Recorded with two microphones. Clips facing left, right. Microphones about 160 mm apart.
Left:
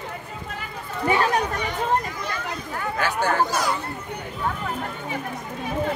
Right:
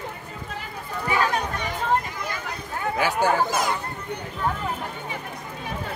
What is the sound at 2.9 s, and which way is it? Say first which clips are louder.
Speech: right 1 dB; 10° right (ahead or behind).